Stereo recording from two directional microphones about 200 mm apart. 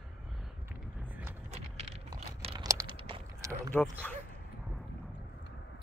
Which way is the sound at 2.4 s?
30° right (ahead or behind).